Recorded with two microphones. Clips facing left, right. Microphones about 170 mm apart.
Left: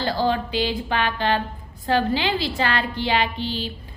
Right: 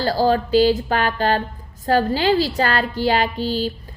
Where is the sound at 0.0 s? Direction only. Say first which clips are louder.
Right 4 dB; 40° right (ahead or behind).